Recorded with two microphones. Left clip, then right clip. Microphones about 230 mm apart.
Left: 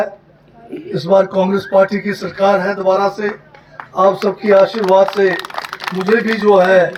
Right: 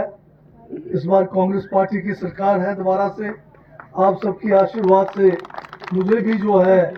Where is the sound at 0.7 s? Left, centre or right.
Centre.